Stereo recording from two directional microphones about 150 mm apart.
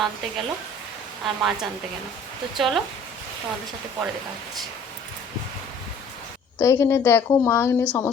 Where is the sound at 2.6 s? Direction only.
Centre (ahead or behind).